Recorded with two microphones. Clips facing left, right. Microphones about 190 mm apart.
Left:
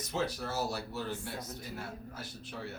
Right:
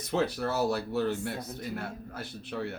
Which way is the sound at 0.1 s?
60° right (ahead or behind).